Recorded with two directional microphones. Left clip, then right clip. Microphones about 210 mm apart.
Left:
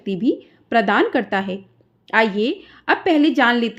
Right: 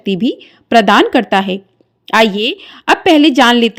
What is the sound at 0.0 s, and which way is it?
A woman's voice, 35° right (ahead or behind).